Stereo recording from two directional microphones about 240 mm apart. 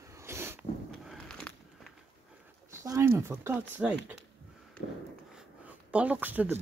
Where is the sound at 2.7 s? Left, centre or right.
Centre.